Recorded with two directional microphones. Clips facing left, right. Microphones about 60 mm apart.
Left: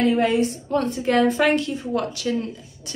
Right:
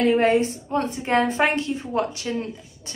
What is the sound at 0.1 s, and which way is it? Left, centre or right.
Speech, right.